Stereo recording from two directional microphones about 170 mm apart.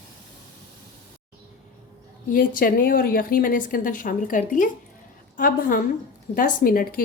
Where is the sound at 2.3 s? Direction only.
55° left (ahead or behind).